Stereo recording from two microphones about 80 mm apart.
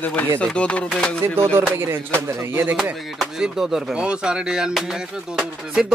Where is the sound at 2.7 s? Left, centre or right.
Centre.